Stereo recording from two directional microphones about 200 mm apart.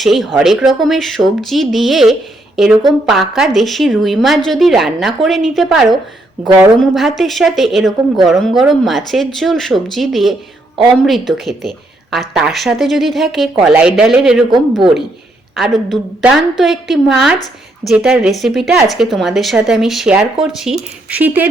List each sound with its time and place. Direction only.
0.0 s a woman's voice: centre (ahead or behind)
15.5 s a woman's voice: centre (ahead or behind)